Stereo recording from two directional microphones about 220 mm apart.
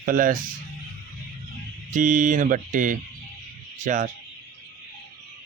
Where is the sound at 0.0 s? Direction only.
40° right (ahead or behind).